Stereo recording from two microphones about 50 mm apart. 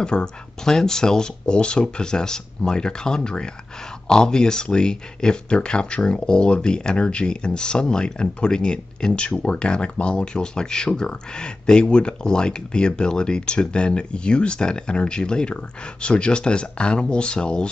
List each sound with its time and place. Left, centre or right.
0.0 s speech: centre